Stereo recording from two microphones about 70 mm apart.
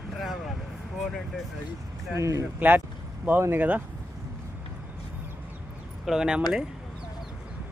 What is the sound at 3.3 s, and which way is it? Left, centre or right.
Speech, right.